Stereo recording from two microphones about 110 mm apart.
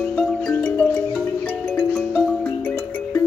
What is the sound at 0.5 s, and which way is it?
Music, 15° left (ahead or behind).